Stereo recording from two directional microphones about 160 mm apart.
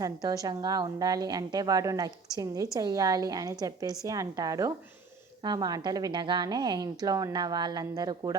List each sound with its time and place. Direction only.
0.0 s a woman's voice: 20° right (ahead or behind)